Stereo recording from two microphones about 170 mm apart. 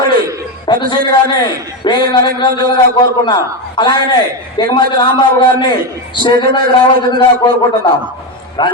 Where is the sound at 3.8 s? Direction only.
25° left (ahead or behind).